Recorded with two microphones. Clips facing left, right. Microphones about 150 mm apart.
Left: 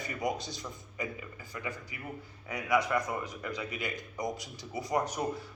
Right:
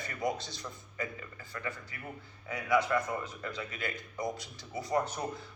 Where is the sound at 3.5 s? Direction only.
15° left (ahead or behind).